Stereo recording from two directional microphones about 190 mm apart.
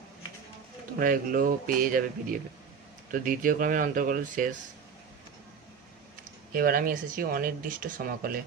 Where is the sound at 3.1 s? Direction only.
45° right (ahead or behind).